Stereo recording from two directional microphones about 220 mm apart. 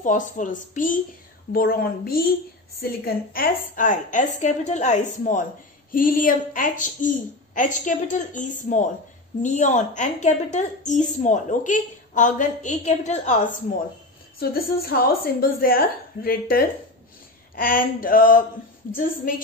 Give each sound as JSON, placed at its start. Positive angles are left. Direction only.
{"t": 0.0, "sound": "a woman's voice", "side_deg": 35}
{"t": 3.3, "sound": "a woman's voice", "side_deg": 40}
{"t": 14.4, "sound": "a woman's voice", "side_deg": 45}